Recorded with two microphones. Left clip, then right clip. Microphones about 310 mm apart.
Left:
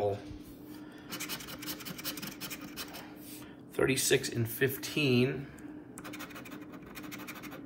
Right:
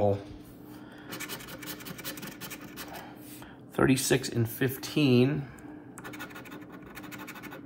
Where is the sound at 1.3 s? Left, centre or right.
Centre.